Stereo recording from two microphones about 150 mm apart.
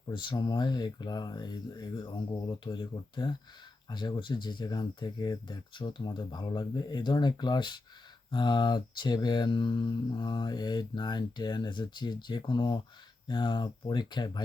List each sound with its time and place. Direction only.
0.1 s speech: 30° left (ahead or behind)